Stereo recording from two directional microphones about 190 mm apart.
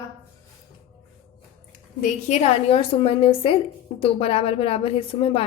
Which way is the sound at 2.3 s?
35° left (ahead or behind).